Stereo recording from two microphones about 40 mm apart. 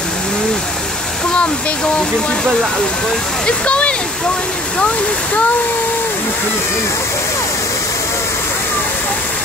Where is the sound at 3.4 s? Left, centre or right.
Left.